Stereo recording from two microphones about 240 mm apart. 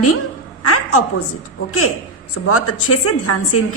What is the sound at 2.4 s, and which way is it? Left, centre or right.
A woman's voice, left.